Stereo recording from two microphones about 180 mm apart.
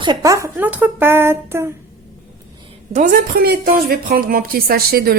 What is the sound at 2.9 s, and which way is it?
A woman's voice, 45° right (ahead or behind).